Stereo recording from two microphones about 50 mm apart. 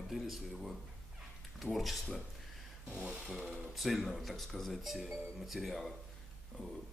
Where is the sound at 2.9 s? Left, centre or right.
Centre.